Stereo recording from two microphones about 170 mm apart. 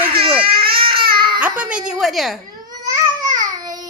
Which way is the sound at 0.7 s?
30° right (ahead or behind).